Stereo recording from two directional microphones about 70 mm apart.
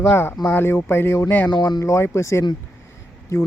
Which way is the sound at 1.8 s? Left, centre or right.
Left.